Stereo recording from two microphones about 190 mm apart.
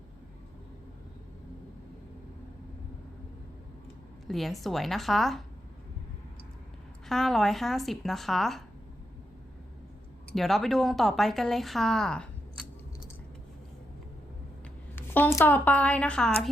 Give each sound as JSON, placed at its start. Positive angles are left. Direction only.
{"t": 4.3, "sound": "speech", "side_deg": 0}
{"t": 7.1, "sound": "speech", "side_deg": 0}
{"t": 10.3, "sound": "speech", "side_deg": 0}
{"t": 14.9, "sound": "speech", "side_deg": 10}